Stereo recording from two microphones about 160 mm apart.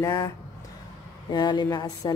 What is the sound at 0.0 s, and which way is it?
Speech, 25° left (ahead or behind).